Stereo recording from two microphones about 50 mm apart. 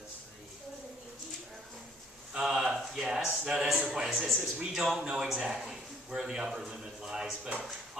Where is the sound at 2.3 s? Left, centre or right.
Centre.